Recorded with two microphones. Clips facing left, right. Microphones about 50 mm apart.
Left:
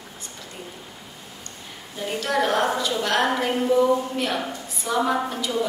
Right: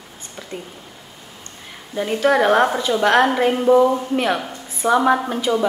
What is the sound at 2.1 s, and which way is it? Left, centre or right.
A woman's voice, right.